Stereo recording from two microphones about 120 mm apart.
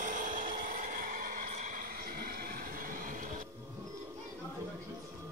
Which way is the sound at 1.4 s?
90° right.